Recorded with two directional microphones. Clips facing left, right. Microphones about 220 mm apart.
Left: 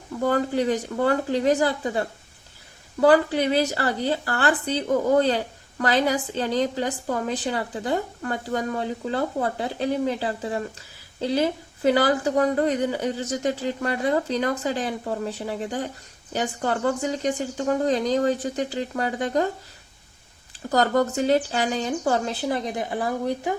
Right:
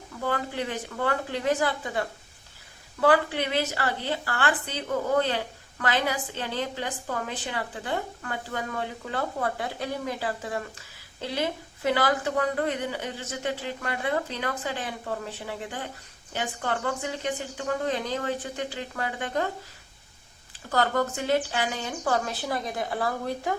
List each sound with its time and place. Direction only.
0.3 s speech: 40° left (ahead or behind)
20.7 s speech: 35° left (ahead or behind); by 23.6 s 15° left (ahead or behind)